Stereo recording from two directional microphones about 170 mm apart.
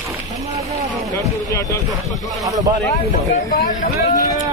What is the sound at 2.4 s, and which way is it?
Speech, 20° right (ahead or behind).